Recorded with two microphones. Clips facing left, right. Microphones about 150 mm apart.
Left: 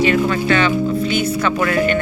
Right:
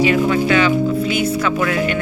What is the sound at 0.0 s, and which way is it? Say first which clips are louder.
Music: right 1 dB; 10° right (ahead or behind).